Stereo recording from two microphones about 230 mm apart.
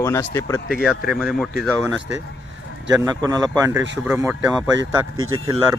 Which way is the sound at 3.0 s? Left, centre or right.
Centre.